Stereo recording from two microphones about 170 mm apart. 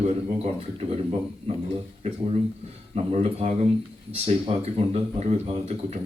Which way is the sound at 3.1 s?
40° right (ahead or behind).